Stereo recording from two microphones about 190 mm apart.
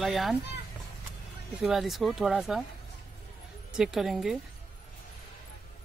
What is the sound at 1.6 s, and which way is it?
Speech, centre (ahead or behind).